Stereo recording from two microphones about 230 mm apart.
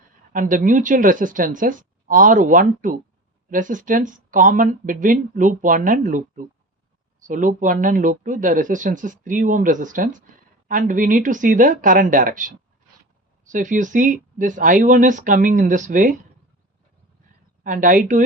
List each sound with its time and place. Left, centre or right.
0.3 s speech: right
17.6 s speech: right